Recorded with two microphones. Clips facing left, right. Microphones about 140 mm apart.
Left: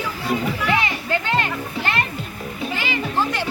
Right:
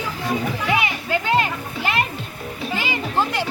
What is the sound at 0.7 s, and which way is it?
Music, 15° right (ahead or behind).